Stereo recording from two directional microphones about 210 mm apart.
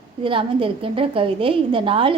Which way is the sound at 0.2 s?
25° right (ahead or behind).